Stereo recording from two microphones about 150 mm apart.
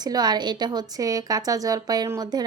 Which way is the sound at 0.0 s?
25° right (ahead or behind).